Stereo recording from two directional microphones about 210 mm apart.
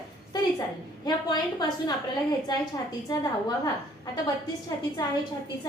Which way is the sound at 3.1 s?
20° left (ahead or behind).